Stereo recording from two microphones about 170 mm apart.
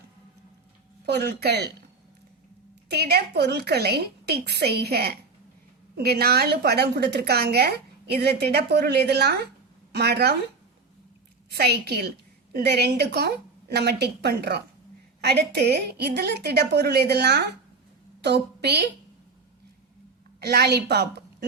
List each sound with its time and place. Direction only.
1.0 s a woman's voice: 75° right (ahead or behind)
2.9 s a woman's voice: 70° right (ahead or behind)
11.5 s a woman's voice: 70° right (ahead or behind)
20.4 s a woman's voice: 70° right (ahead or behind)